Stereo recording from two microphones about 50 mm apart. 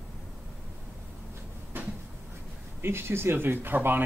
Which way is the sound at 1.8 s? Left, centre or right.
Right.